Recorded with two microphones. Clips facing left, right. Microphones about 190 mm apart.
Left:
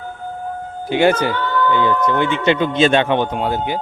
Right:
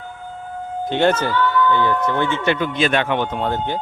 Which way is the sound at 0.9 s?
10° left (ahead or behind).